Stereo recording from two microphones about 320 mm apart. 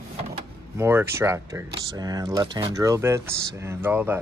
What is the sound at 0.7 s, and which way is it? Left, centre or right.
Speech, centre.